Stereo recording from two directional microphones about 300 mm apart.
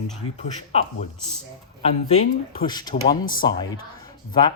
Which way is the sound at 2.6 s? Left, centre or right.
Centre.